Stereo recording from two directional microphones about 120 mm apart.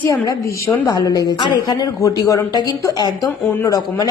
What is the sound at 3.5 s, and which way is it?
Speech, 25° left (ahead or behind).